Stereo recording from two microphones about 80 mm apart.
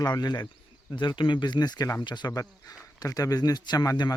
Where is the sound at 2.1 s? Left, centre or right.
Left.